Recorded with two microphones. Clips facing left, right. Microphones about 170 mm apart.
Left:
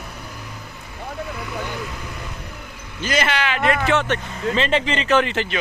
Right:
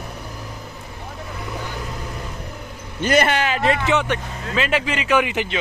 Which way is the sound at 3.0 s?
50° right (ahead or behind).